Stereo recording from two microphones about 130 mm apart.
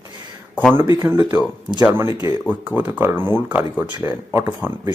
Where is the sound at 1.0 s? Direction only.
25° right (ahead or behind).